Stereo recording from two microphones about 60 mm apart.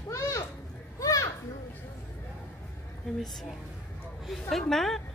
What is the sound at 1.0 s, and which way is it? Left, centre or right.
Children playing, left.